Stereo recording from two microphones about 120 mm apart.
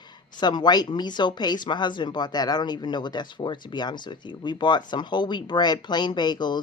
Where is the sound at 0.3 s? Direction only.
35° left (ahead or behind).